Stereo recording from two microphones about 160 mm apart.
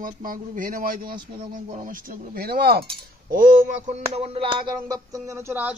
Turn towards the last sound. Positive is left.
turn(degrees=-15)  # may be behind; listen again after turning